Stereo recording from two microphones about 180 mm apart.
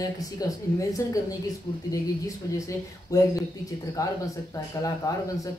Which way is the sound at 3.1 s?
20° left (ahead or behind).